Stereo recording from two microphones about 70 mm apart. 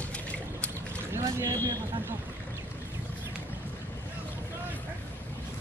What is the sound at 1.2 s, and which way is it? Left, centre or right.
Speech, right.